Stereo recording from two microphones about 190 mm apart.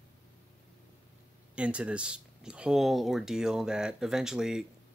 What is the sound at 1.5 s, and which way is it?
Speech, 5° right (ahead or behind).